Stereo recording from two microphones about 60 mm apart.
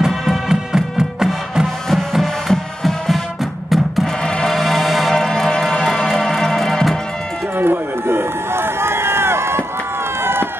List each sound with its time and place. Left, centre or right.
0.0 s music: centre
1.9 s music: centre
7.5 s run: right